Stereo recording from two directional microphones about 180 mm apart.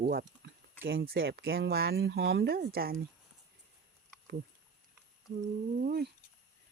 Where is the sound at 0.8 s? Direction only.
65° right (ahead or behind).